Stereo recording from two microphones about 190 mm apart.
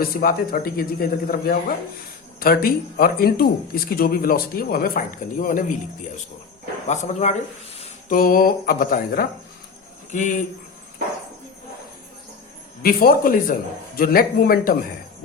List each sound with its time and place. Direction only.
0.0 s speech: 50° left (ahead or behind)
6.8 s speech: 40° left (ahead or behind)
8.1 s speech: 50° left (ahead or behind)
10.1 s speech: 40° left (ahead or behind)
12.8 s speech: 50° left (ahead or behind)